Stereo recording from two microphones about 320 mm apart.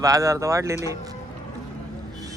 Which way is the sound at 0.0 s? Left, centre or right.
Centre.